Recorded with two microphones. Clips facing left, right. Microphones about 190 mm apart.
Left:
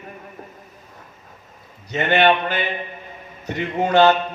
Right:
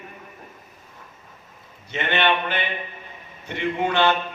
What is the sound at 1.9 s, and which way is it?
A man's voice, 40° left (ahead or behind).